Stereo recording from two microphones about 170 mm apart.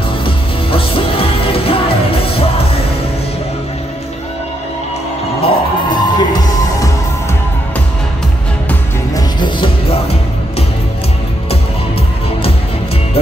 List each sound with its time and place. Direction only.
0.2 s music: 30° left (ahead or behind)
5.4 s music: 25° left (ahead or behind)
9.1 s music: 30° left (ahead or behind)